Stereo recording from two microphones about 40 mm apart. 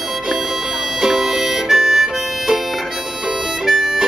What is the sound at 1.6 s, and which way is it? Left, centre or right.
Harmonica, centre.